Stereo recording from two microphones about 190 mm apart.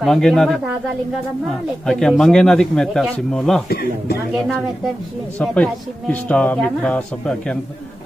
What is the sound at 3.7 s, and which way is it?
Speech, 55° left (ahead or behind).